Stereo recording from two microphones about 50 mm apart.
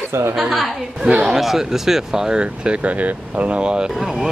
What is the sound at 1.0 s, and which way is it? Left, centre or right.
Speech, right.